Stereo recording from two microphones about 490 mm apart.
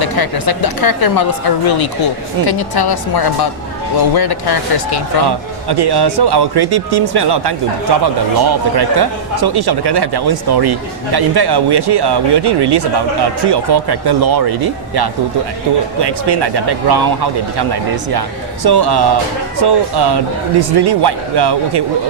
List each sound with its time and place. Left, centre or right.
0.0 s speech: left
5.6 s speech: right